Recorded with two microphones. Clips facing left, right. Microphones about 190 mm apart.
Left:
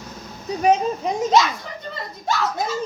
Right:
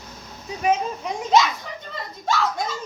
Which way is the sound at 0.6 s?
35° left (ahead or behind).